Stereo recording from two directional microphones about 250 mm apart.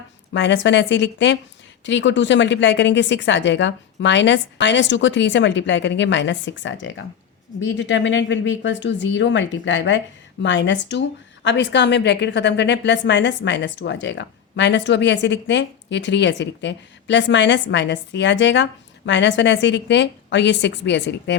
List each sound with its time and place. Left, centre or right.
0.3 s a woman's voice: left